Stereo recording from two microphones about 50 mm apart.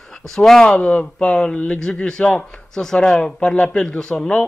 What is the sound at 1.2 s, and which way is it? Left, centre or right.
Speech, centre.